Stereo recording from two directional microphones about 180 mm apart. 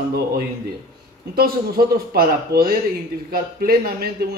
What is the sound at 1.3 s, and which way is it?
A man's voice, 55° right (ahead or behind).